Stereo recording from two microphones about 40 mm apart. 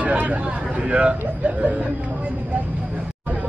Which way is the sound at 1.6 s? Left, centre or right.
Right.